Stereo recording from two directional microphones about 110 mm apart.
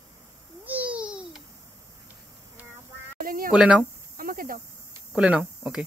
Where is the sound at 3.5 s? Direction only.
5° right (ahead or behind).